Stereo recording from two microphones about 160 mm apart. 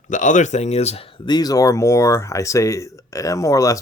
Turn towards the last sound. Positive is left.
turn(degrees=20)  # may be behind; listen again after turning